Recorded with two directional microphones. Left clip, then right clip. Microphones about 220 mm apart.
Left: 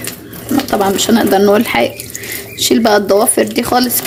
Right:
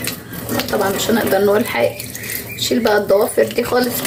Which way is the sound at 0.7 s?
45° left (ahead or behind).